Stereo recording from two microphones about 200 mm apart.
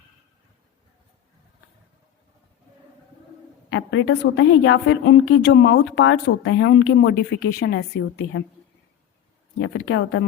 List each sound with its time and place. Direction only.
3.7 s a woman's voice: 70° left (ahead or behind)
9.6 s speech: 60° left (ahead or behind)